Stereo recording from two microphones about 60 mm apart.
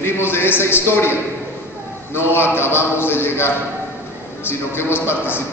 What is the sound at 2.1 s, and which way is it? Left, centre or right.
A man's voice, left.